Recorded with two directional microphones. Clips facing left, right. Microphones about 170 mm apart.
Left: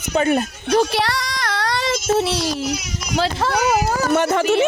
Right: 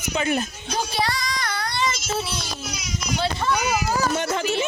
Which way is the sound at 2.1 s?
85° left.